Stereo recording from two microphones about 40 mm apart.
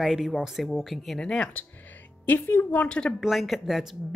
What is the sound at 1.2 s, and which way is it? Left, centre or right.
Speech, centre.